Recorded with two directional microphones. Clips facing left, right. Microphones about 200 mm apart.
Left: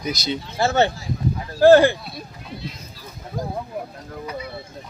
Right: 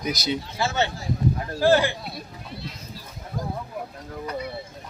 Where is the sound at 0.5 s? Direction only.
50° left (ahead or behind).